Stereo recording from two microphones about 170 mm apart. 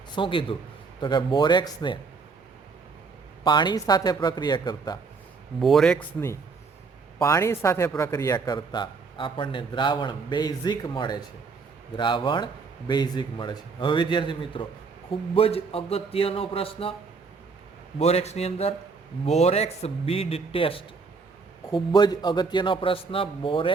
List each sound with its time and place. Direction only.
0.2 s a man's voice: 30° left (ahead or behind)
3.4 s a man's voice: 25° left (ahead or behind)
5.5 s speech: centre (ahead or behind)
7.2 s a man's voice: 15° left (ahead or behind); by 16.9 s 35° left (ahead or behind)
18.0 s a man's voice: 40° left (ahead or behind)